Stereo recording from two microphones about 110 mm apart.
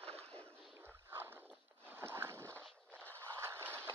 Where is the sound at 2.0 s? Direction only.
20° right (ahead or behind).